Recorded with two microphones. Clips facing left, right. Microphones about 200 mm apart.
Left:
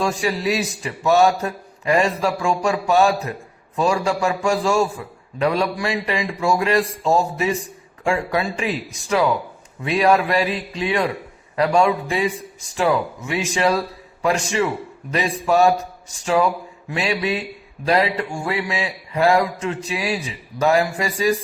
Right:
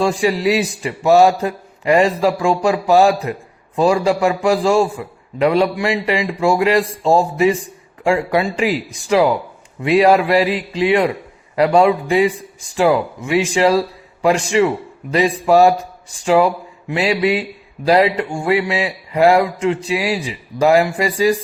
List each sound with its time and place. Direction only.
0.0 s a man's voice: 30° right (ahead or behind)